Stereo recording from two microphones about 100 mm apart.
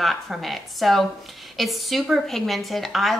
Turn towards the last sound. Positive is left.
turn(degrees=0)  # may be behind; listen again after turning